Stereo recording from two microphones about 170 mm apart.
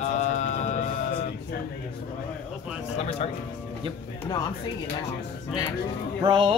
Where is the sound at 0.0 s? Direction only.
45° left (ahead or behind).